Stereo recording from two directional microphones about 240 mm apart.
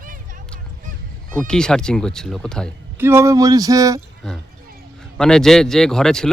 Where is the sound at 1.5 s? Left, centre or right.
Centre.